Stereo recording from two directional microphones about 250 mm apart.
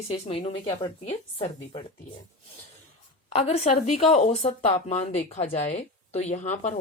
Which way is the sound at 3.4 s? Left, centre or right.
Left.